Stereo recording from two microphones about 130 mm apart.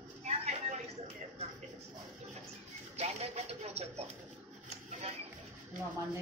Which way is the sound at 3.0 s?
55° right (ahead or behind).